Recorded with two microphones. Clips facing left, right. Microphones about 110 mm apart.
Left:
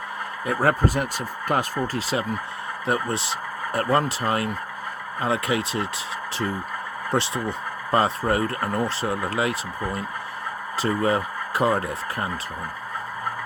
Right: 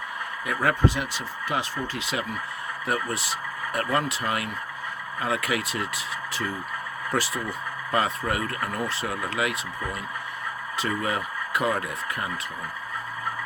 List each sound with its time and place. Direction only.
0.4 s speech: 35° left (ahead or behind)
7.1 s speech: 30° left (ahead or behind)